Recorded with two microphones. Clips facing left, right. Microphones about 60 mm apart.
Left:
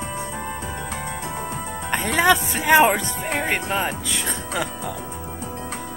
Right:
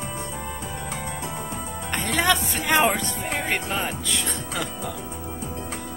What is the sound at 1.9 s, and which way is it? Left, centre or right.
Speech, centre.